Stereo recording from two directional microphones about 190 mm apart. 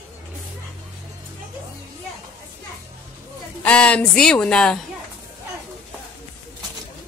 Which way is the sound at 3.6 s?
5° left (ahead or behind).